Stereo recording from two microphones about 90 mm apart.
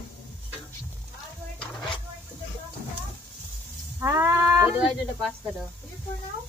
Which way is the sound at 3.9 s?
30° right (ahead or behind).